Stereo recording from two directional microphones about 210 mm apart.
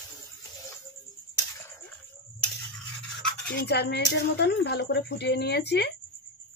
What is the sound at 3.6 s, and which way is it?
Speech, 55° left (ahead or behind).